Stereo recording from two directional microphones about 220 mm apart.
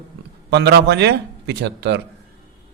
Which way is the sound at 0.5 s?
50° right (ahead or behind).